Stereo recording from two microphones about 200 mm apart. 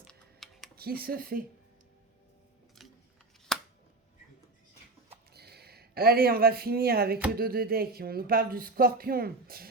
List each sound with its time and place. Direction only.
0.1 s typing: centre (ahead or behind)
0.8 s speech: 50° right (ahead or behind)
3.5 s a sound: centre (ahead or behind)
5.3 s speech: 55° right (ahead or behind)